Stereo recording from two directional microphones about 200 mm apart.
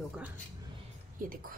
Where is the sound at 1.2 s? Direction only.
45° right (ahead or behind).